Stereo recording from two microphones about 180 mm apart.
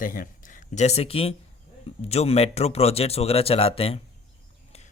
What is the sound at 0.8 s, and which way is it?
Speech, 35° left (ahead or behind).